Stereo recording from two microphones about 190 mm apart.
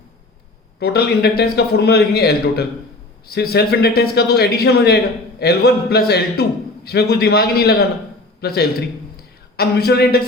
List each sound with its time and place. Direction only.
0.8 s a man's voice: 55° left (ahead or behind)